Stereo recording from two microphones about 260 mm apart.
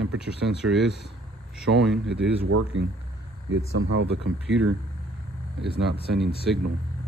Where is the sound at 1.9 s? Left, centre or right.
Right.